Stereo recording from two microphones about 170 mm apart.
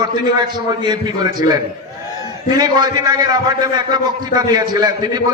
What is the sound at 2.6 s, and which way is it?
A man's voice, 25° right (ahead or behind).